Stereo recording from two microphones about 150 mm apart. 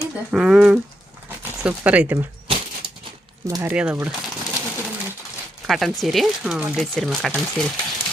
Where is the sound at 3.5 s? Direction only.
20° right (ahead or behind).